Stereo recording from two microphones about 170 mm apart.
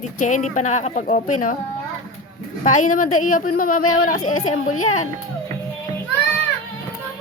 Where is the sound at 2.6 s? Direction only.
50° left (ahead or behind).